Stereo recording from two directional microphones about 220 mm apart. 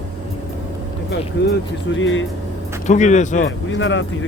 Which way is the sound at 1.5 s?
60° left (ahead or behind).